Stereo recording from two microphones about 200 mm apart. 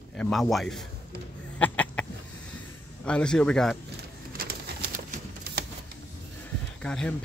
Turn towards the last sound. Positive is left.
turn(degrees=5)  # may be behind; listen again after turning